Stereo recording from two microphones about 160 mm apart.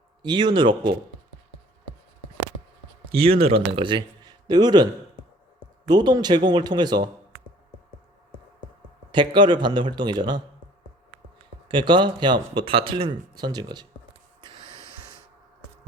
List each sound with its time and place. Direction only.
0.2 s speech: 30° right (ahead or behind)
3.1 s speech: 35° right (ahead or behind)
5.9 s speech: 25° right (ahead or behind)
9.1 s speech: 30° right (ahead or behind)
11.7 s speech: 30° right (ahead or behind)